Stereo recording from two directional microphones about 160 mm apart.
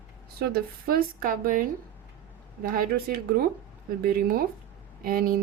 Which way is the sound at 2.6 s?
65° right (ahead or behind).